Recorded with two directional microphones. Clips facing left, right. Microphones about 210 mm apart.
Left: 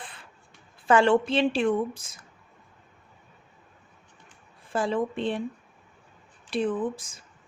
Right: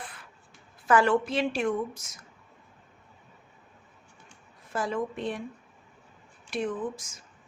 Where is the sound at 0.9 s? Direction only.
30° left (ahead or behind).